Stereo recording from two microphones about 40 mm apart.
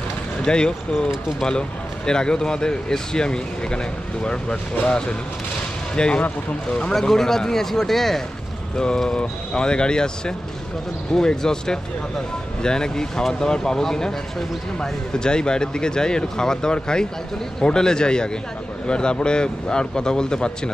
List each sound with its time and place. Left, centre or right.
0.5 s speech: left
6.9 s speech: centre
8.7 s speech: left